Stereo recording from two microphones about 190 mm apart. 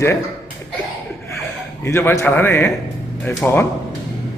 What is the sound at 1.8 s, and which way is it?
Speech, 10° left (ahead or behind).